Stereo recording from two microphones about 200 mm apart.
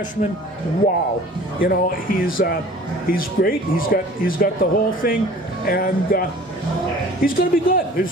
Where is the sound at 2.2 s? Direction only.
45° left (ahead or behind).